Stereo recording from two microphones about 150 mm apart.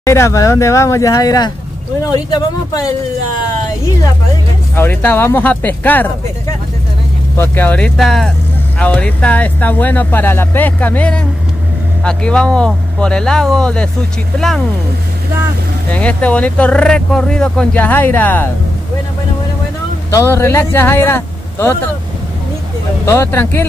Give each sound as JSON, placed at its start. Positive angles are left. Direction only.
{"t": 0.0, "sound": "speech", "side_deg": 20}
{"t": 4.7, "sound": "speech", "side_deg": 15}
{"t": 7.3, "sound": "speech", "side_deg": 10}
{"t": 15.9, "sound": "speech", "side_deg": 10}
{"t": 20.1, "sound": "a man's voice", "side_deg": 20}
{"t": 23.0, "sound": "speech", "side_deg": 15}